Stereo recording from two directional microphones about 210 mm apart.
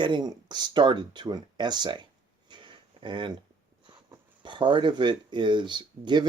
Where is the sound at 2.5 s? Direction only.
20° right (ahead or behind).